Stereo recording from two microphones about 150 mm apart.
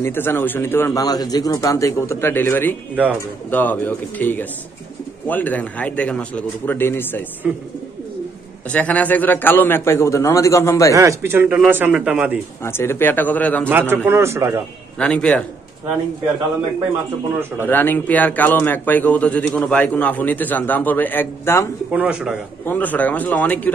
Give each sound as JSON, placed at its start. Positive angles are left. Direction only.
{"t": 0.0, "sound": "a man's voice", "side_deg": 15}
{"t": 8.7, "sound": "a man's voice", "side_deg": 10}
{"t": 11.0, "sound": "a man's voice", "side_deg": -20}
{"t": 12.6, "sound": "a man's voice", "side_deg": 15}
{"t": 13.7, "sound": "a man's voice", "side_deg": -15}
{"t": 15.0, "sound": "a man's voice", "side_deg": 10}
{"t": 17.6, "sound": "a man's voice", "side_deg": 15}
{"t": 21.9, "sound": "a man's voice", "side_deg": -10}
{"t": 22.7, "sound": "a man's voice", "side_deg": 10}